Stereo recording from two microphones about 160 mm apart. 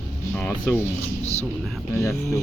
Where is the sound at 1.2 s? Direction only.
45° left (ahead or behind).